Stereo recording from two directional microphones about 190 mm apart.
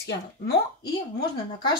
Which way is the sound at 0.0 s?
60° left (ahead or behind).